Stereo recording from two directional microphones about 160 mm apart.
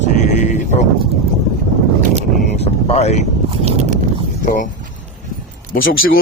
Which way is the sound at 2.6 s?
40° left (ahead or behind).